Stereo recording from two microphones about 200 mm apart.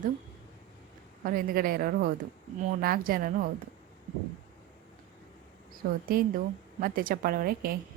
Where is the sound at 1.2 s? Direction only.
45° right (ahead or behind).